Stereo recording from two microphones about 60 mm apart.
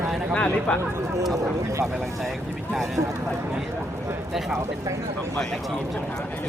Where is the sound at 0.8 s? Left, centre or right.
Right.